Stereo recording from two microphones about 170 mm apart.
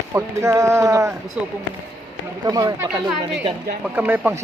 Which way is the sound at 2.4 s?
25° right (ahead or behind).